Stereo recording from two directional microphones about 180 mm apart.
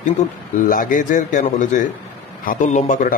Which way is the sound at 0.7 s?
50° left (ahead or behind).